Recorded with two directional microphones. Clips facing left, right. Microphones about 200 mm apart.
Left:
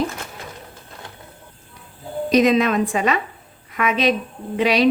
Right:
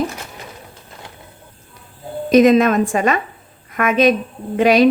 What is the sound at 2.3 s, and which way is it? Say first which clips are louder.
A woman's voice: right 5 dB; 50° right (ahead or behind).